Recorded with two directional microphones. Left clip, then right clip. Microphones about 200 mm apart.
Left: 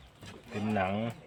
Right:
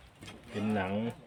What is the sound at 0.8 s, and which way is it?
Speech, 55° left (ahead or behind).